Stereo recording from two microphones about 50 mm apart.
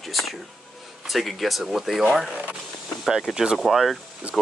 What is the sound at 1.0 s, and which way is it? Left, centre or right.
Speech, centre.